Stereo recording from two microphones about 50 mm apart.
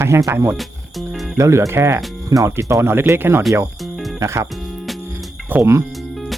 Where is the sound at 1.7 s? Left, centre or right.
Right.